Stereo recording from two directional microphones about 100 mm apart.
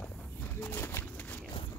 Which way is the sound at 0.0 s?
15° left (ahead or behind).